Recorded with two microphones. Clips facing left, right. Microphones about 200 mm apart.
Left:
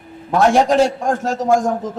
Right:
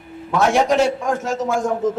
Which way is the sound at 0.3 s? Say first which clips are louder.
Left 3 dB; 35° left (ahead or behind).